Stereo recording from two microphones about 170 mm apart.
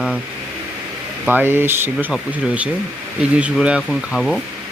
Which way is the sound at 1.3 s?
10° right (ahead or behind).